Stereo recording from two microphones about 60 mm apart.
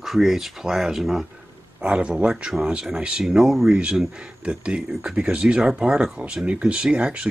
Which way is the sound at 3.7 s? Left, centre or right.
Centre.